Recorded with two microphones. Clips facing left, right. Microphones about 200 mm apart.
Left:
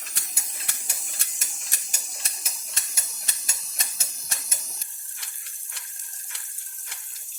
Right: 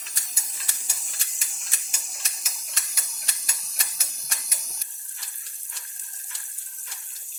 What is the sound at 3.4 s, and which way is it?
Steam, 25° left (ahead or behind).